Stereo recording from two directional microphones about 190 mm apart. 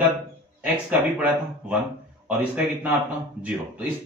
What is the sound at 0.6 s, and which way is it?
A man's voice, 10° right (ahead or behind).